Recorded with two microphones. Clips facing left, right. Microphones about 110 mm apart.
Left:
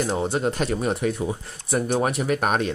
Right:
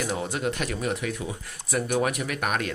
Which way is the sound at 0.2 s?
30° left (ahead or behind).